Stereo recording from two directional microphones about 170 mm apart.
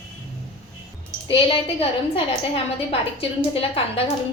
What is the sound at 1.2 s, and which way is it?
A woman's voice, 30° left (ahead or behind).